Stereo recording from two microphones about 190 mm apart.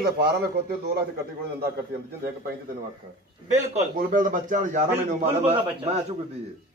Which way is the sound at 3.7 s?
40° right (ahead or behind).